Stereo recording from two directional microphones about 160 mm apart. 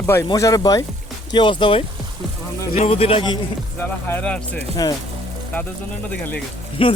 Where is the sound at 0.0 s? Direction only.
15° left (ahead or behind); by 3.2 s 35° left (ahead or behind).